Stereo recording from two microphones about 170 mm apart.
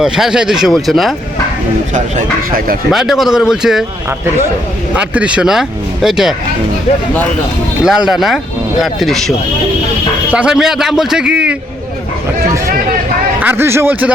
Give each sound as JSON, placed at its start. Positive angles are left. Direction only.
{"t": 0.0, "sound": "speech", "side_deg": -5}
{"t": 1.9, "sound": "speech", "side_deg": -55}
{"t": 2.9, "sound": "speech", "side_deg": 0}
{"t": 4.9, "sound": "speech", "side_deg": -5}
{"t": 7.9, "sound": "speech", "side_deg": -5}
{"t": 10.3, "sound": "speech", "side_deg": -5}
{"t": 13.4, "sound": "speech", "side_deg": -10}